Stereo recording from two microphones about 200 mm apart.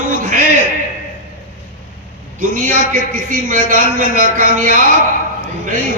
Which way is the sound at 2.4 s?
40° right (ahead or behind).